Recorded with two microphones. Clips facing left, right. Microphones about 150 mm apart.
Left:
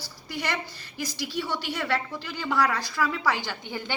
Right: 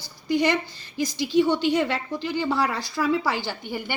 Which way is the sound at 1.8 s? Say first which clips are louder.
Right 3 dB; 15° right (ahead or behind).